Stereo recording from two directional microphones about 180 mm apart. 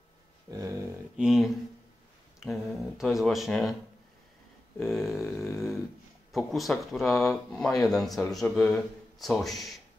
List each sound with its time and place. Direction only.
0.5 s dog: 20° right (ahead or behind)
1.1 s speech: 5° right (ahead or behind)
4.7 s speech: centre (ahead or behind)